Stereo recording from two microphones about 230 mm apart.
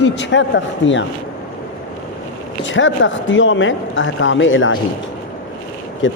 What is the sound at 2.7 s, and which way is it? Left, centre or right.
Speech, left.